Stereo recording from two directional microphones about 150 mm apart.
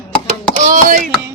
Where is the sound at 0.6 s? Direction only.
60° right (ahead or behind).